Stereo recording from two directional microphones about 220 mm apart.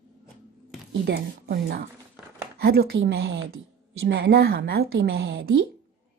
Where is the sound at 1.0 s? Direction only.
45° right (ahead or behind).